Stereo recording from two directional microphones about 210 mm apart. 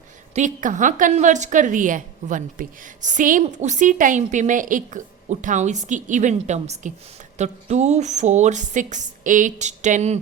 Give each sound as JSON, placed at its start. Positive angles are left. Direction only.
{"t": 0.3, "sound": "a woman's voice", "side_deg": -35}